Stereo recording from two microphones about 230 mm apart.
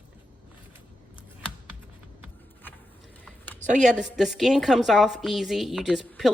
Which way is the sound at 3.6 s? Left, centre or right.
Right.